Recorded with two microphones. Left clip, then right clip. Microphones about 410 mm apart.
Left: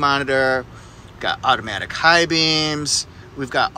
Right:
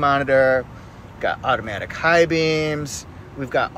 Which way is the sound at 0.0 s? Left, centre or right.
Centre.